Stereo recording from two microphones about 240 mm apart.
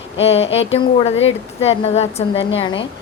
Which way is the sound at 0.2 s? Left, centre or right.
Left.